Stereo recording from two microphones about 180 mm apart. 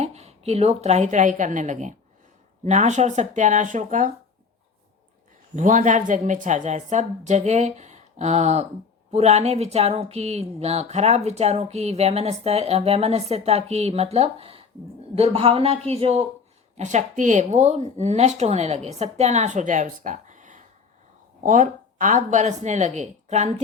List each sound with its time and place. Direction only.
0.0 s a woman's voice: 35° right (ahead or behind)
5.5 s speech: 45° right (ahead or behind)